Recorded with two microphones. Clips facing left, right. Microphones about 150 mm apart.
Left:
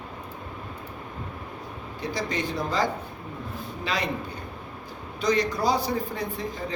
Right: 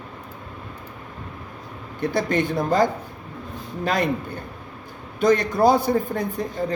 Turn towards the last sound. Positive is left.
turn(degrees=-50)  # may be behind; listen again after turning